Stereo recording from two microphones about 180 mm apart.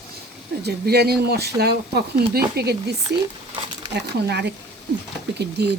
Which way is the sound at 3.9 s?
70° right (ahead or behind).